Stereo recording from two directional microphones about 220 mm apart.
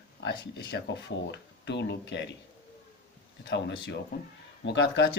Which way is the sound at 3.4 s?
50° left (ahead or behind).